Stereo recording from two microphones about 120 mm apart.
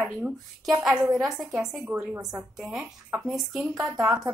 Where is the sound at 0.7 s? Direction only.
5° right (ahead or behind).